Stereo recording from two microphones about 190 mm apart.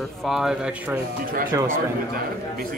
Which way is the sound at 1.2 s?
45° right (ahead or behind).